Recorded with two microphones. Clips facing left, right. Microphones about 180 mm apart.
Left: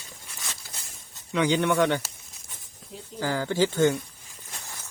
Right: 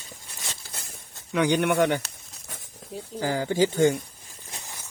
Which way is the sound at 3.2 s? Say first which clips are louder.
Right 1 dB; 15° right (ahead or behind).